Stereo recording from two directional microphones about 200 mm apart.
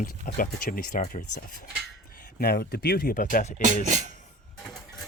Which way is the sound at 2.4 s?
50° left (ahead or behind).